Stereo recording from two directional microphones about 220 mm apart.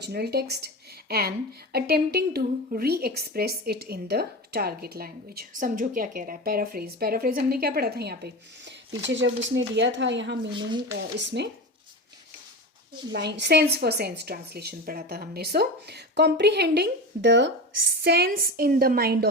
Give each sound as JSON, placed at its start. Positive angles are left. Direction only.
{"t": 0.0, "sound": "a woman's voice", "side_deg": -45}
{"t": 9.0, "sound": "speech", "side_deg": -55}
{"t": 10.5, "sound": "speech", "side_deg": -20}
{"t": 10.9, "sound": "a woman's voice", "side_deg": -50}
{"t": 13.1, "sound": "a woman's voice", "side_deg": -50}